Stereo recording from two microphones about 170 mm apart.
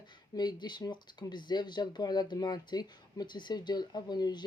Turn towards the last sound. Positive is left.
turn(degrees=25)  # may be behind; listen again after turning